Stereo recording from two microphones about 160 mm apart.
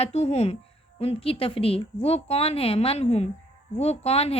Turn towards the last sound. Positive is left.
turn(degrees=40)  # may be behind; listen again after turning